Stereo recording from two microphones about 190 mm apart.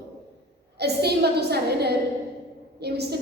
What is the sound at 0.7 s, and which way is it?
A woman's voice, 60° right (ahead or behind).